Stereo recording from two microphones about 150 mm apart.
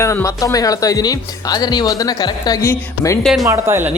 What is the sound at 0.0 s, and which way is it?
Speech, 20° left (ahead or behind).